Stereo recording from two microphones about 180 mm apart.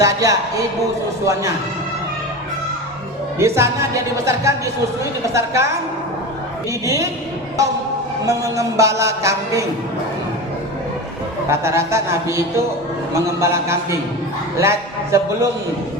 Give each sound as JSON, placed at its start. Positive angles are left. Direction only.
{"t": 0.0, "sound": "a woman's voice", "side_deg": -20}
{"t": 3.3, "sound": "a woman's voice", "side_deg": -15}
{"t": 6.8, "sound": "a woman's voice", "side_deg": -15}
{"t": 8.3, "sound": "a woman's voice", "side_deg": -20}
{"t": 11.4, "sound": "a woman's voice", "side_deg": -15}